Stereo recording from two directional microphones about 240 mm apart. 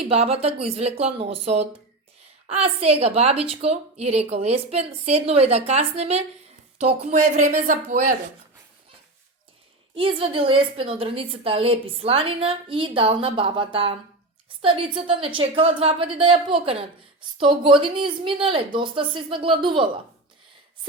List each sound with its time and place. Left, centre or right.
0.1 s a woman's voice: right
9.9 s a woman's voice: right